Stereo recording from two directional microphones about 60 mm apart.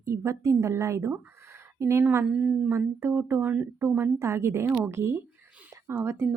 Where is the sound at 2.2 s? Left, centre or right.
Centre.